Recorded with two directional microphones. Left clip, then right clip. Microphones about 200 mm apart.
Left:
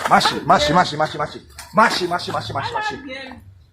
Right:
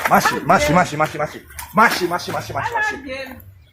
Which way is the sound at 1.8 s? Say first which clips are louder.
Right 1 dB; 20° right (ahead or behind).